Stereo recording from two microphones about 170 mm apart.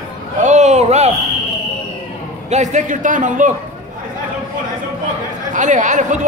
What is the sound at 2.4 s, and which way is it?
A man's voice, 45° right (ahead or behind).